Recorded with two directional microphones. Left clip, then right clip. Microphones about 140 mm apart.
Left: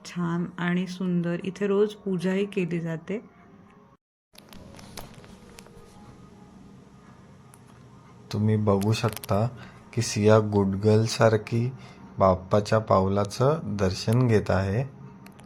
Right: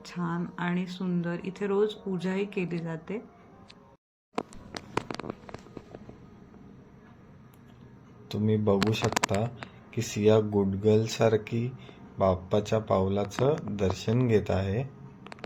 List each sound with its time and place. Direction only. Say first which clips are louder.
0.0 s speech: left 3 dB; 30° left (ahead or behind)
8.3 s speech: left 1 dB; 15° left (ahead or behind)